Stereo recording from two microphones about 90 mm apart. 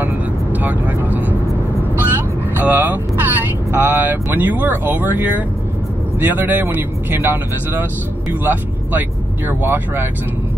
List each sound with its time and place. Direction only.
0.0 s vehicle: 20° right (ahead or behind)
3.7 s speech: 20° right (ahead or behind)